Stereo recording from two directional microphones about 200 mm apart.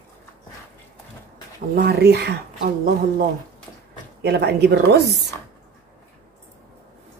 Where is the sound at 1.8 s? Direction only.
55° right (ahead or behind).